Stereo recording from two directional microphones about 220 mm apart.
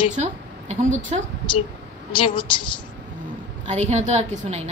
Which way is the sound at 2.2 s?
20° left (ahead or behind).